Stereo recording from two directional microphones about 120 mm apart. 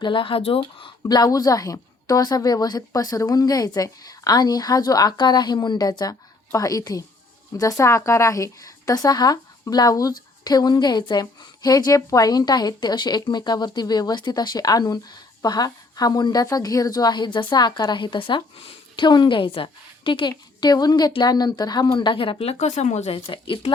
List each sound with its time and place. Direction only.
0.0 s speech: 45° left (ahead or behind)
0.8 s a woman's voice: 35° left (ahead or behind); by 23.1 s 70° left (ahead or behind)
23.1 s speech: 45° left (ahead or behind)